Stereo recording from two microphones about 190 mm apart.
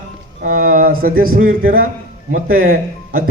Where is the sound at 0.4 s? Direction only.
45° right (ahead or behind).